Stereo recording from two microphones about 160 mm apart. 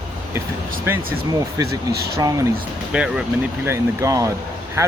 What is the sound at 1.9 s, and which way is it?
Speech, 80° right.